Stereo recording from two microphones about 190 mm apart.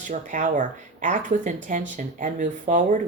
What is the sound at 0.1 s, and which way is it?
Speech, 40° right (ahead or behind).